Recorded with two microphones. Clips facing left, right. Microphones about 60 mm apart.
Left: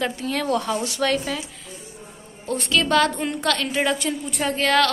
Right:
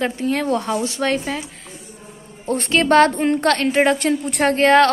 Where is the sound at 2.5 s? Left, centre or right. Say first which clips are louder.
Right 5 dB; right.